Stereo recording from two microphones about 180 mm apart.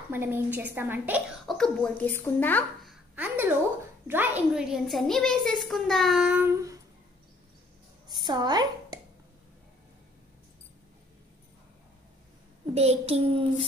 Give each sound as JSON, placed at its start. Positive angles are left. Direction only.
{"t": 0.1, "sound": "a woman's voice", "side_deg": -10}
{"t": 2.9, "sound": "a sound", "side_deg": -10}
{"t": 4.1, "sound": "a woman's voice", "side_deg": -10}
{"t": 8.1, "sound": "a woman's voice", "side_deg": -25}
{"t": 12.7, "sound": "a child's voice", "side_deg": -35}